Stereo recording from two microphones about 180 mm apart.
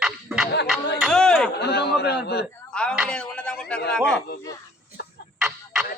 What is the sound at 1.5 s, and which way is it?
Speech, 65° left (ahead or behind).